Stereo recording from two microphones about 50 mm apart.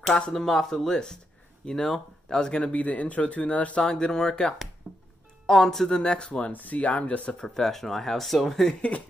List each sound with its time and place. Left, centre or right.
0.3 s speech: centre
2.7 s speech: left
3.8 s speech: centre
4.9 s music: centre
5.5 s speech: centre
6.5 s speech: left
7.4 s speech: centre